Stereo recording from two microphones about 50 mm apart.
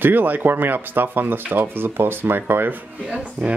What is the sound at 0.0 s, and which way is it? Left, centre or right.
Speech, right.